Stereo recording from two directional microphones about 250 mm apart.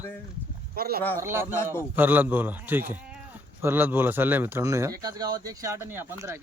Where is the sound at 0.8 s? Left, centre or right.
Right.